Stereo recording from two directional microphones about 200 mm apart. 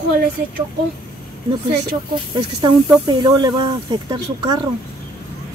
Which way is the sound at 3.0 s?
20° right (ahead or behind).